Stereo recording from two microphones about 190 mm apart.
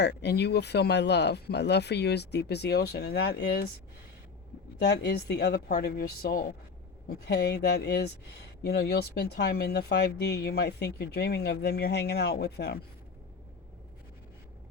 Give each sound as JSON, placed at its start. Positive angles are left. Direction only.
{"t": 0.0, "sound": "speech", "side_deg": 60}
{"t": 4.8, "sound": "speech", "side_deg": 60}